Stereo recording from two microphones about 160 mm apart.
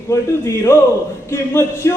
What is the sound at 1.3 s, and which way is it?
Speech, 15° left (ahead or behind).